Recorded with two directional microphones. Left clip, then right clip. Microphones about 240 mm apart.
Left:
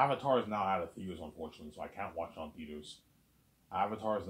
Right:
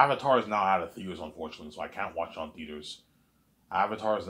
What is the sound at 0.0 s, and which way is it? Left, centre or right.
Speech, right.